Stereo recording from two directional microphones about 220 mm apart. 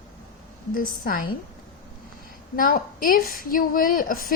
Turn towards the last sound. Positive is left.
turn(degrees=40)  # may be behind; listen again after turning